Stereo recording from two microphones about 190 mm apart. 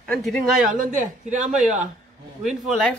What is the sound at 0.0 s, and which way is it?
Speech, 5° left (ahead or behind).